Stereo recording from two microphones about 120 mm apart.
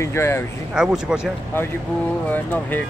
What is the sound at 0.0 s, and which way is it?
Speech, 20° left (ahead or behind).